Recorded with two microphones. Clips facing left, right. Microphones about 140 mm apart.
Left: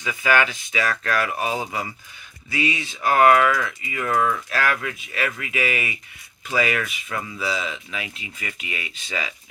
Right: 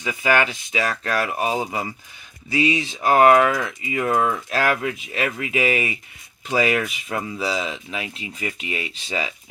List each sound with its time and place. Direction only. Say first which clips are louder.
0.0 s speech: right 1 dB; 25° right (ahead or behind)